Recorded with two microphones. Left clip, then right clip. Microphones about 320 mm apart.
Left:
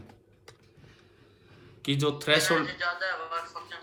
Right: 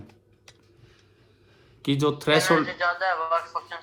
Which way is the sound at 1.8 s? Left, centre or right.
Centre.